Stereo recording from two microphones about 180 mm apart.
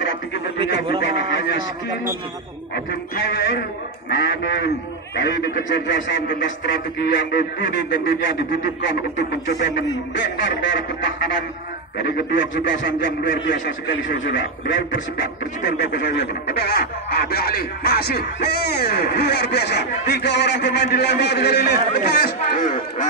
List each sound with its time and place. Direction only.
1.0 s a sound: 85° left
2.7 s a man's voice: 65° left (ahead or behind); by 7.2 s 80° left
8.8 s speech: 80° left
10.4 s speech: 90° left
12.0 s speech: 80° left
15.6 s speech: 65° left (ahead or behind); by 23.0 s 45° left (ahead or behind)